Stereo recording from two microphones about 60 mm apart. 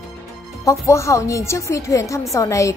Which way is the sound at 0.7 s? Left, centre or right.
Left.